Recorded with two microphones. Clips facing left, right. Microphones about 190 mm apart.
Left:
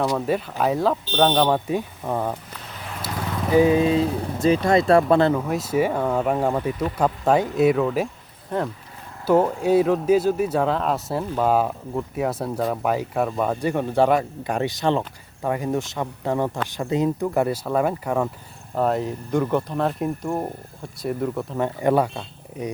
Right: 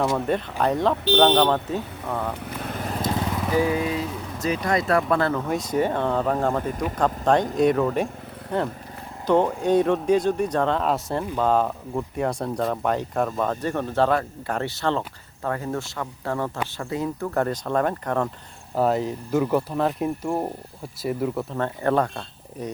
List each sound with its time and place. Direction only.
0.3 s speech: 5° left (ahead or behind)
2.3 s vehicle: 55° right (ahead or behind)
3.5 s speech: 25° left (ahead or behind)
5.3 s speech: 5° left (ahead or behind)
9.2 s speech: 5° left (ahead or behind)
21.6 s speech: 15° left (ahead or behind)